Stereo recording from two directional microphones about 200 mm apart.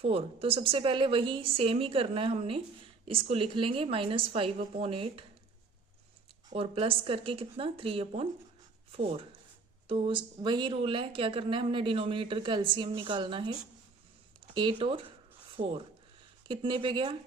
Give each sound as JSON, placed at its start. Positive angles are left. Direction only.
{"t": 0.0, "sound": "a woman's voice", "side_deg": -30}
{"t": 6.5, "sound": "a woman's voice", "side_deg": -30}